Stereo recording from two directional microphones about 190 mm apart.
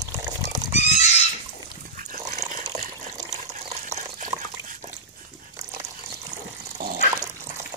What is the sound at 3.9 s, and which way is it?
Water, 35° right (ahead or behind).